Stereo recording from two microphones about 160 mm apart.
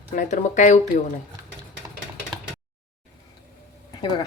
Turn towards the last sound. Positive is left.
turn(degrees=30)  # may be behind; listen again after turning